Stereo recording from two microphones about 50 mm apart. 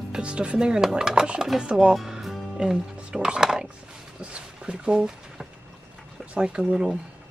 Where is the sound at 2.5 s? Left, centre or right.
Centre.